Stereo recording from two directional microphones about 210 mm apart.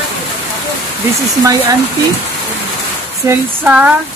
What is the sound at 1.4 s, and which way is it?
Speech, 15° right (ahead or behind).